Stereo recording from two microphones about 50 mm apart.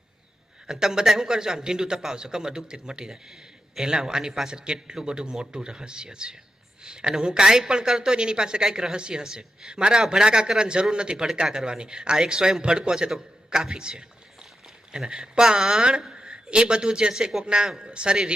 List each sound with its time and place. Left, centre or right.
0.7 s a woman's voice: centre